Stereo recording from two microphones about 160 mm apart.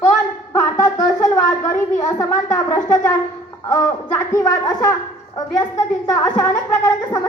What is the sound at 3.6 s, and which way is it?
A woman's voice, 20° left (ahead or behind).